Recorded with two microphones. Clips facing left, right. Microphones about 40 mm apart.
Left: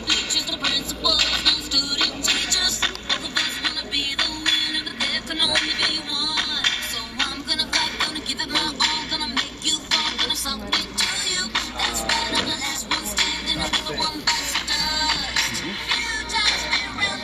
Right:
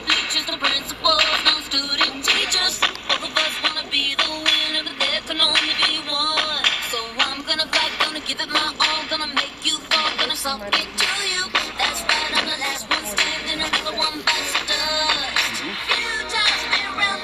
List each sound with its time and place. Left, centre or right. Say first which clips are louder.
0.1 s music: right 3 dB; right